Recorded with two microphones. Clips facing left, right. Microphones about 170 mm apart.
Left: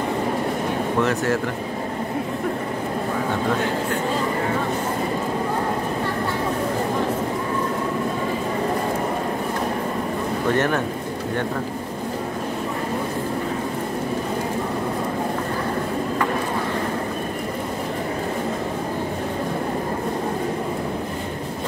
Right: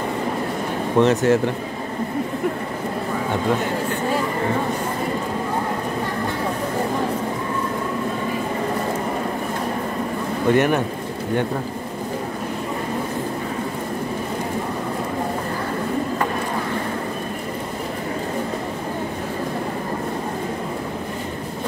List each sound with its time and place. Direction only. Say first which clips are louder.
0.9 s speech: right 7 dB; 20° right (ahead or behind)
10.5 s a man's voice: right 4 dB; 15° right (ahead or behind)